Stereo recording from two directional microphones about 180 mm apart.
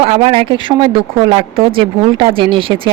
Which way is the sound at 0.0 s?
30° right (ahead or behind).